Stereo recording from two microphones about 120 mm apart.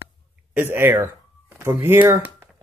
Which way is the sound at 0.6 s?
20° right (ahead or behind).